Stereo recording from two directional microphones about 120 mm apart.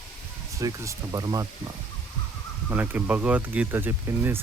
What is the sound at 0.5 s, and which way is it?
Speech, 25° right (ahead or behind).